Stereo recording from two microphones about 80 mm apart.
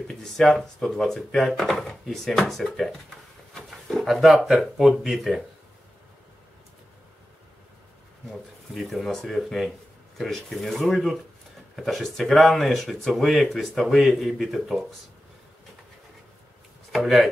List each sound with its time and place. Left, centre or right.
0.1 s speech: centre
8.3 s speech: centre
16.9 s speech: centre